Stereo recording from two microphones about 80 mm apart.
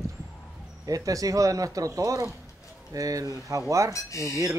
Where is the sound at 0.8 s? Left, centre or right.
Right.